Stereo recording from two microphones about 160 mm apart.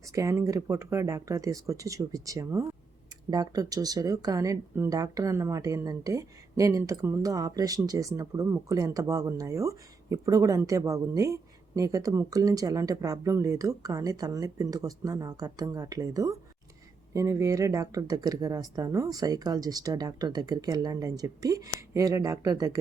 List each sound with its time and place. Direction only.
0.1 s speech: 20° right (ahead or behind)